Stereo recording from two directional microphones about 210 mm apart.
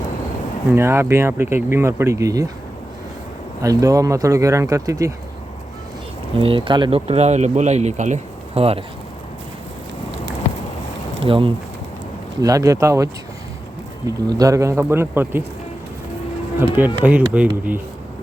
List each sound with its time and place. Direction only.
0.7 s speech: 10° right (ahead or behind)
3.6 s speech: 15° right (ahead or behind)
6.4 s speech: 25° right (ahead or behind)
11.2 s speech: 25° right (ahead or behind)
14.3 s speech: 15° right (ahead or behind)
16.6 s speech: 10° right (ahead or behind)